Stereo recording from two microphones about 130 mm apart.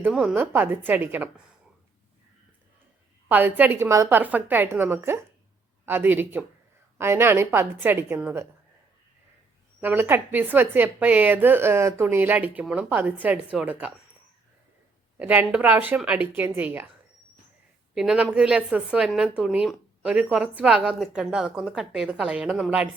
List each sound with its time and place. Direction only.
0.0 s speech: 10° right (ahead or behind)
3.2 s speech: 15° right (ahead or behind)
9.8 s speech: 20° right (ahead or behind)
15.2 s speech: 10° right (ahead or behind)
17.9 s a woman's voice: 5° right (ahead or behind)